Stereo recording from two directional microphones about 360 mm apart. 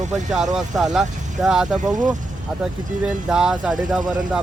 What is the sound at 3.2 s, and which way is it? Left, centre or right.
Speech, centre.